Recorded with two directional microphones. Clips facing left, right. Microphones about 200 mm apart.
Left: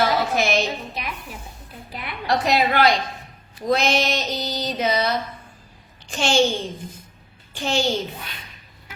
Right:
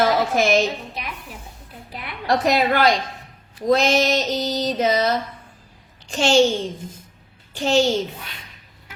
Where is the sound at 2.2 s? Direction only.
45° right (ahead or behind).